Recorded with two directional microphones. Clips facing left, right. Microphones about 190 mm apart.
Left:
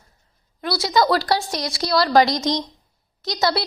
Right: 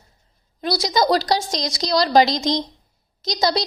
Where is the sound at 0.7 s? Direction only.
15° right (ahead or behind).